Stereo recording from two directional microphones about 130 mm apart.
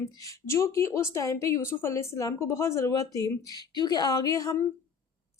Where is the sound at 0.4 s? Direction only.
20° left (ahead or behind).